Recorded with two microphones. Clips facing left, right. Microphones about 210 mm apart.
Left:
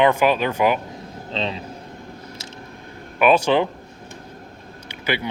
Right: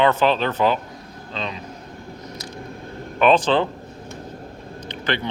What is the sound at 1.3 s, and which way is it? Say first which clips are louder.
Speech: left 4 dB; 30° left (ahead or behind).